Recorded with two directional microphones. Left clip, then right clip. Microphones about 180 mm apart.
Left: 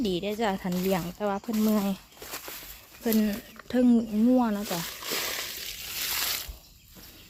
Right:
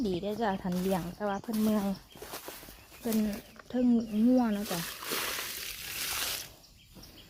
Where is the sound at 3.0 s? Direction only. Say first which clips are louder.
Left 5 dB; 35° left (ahead or behind).